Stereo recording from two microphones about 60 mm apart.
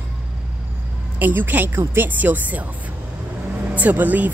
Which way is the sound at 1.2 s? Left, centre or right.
Right.